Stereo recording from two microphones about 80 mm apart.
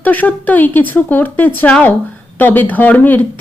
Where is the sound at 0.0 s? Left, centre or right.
Left.